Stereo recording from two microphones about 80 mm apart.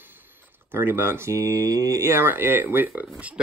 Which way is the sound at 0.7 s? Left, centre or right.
Right.